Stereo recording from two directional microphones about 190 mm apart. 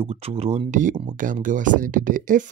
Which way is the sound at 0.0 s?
30° right (ahead or behind).